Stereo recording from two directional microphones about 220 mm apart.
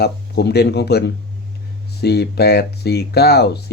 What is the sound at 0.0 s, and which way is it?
Speech, 45° left (ahead or behind).